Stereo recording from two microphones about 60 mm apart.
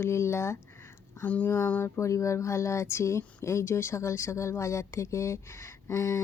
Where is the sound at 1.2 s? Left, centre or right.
Left.